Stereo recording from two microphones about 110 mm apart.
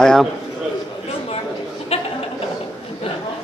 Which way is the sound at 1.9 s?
65° left (ahead or behind).